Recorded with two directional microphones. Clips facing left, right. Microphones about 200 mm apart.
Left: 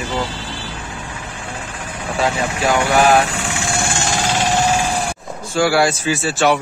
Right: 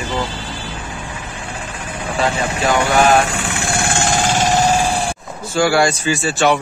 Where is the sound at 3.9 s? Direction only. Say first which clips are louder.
Right 3 dB; 55° right (ahead or behind); by 5.0 s 40° right (ahead or behind).